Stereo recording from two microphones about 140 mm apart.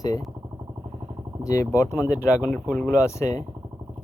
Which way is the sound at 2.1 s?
10° right (ahead or behind).